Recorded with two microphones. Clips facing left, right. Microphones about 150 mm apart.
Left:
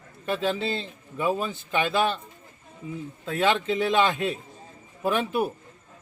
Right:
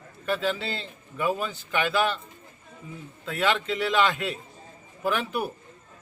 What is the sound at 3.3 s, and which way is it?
Speech, 20° left (ahead or behind).